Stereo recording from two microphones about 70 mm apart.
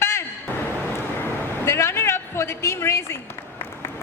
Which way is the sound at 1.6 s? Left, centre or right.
Left.